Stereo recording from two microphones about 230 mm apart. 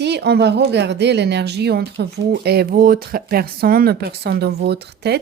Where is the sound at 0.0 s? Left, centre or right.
Right.